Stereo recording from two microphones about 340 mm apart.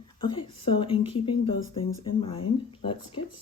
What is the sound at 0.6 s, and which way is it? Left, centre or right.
Speech, centre.